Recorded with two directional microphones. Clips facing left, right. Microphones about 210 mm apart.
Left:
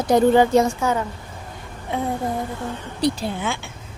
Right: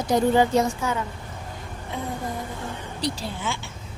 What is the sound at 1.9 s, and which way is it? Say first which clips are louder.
Speech: left 7 dB; 60° left (ahead or behind).